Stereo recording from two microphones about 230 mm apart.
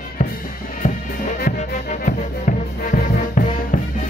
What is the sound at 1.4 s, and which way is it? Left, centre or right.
Music, left.